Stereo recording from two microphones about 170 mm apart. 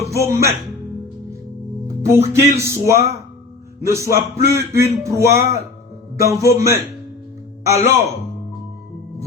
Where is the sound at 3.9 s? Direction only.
15° right (ahead or behind).